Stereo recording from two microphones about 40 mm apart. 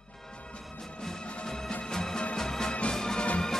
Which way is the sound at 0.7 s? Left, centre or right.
Centre.